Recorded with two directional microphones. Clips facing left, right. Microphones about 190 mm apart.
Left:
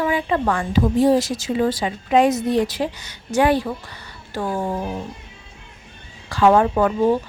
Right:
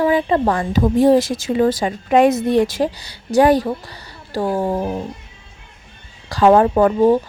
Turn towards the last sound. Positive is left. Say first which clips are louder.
# right 4 dB
turn(degrees=-40)  # may be behind; listen again after turning